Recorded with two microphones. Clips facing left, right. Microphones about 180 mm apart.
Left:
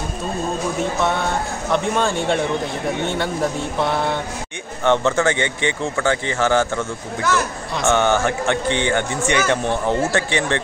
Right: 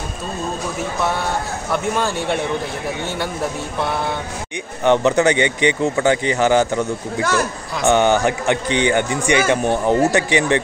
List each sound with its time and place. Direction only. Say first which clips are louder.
0.7 s speech: left 1 dB; 5° right (ahead or behind)
4.8 s a man's voice: right 3 dB; 15° right (ahead or behind)